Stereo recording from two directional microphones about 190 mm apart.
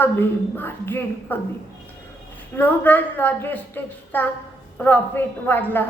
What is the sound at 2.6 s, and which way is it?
A woman's voice, 10° left (ahead or behind).